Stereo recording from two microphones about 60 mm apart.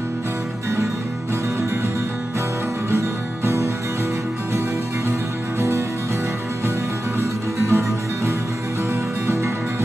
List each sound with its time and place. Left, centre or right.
2.9 s music: right
5.6 s music: right
7.2 s music: right
9.3 s music: right